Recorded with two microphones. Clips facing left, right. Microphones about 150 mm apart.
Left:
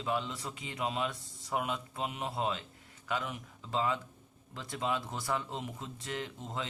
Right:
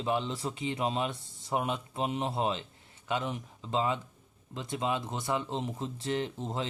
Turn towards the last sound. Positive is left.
turn(degrees=-30)  # may be behind; listen again after turning